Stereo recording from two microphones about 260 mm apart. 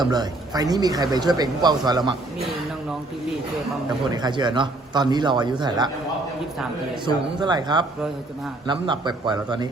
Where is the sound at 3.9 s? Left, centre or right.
Centre.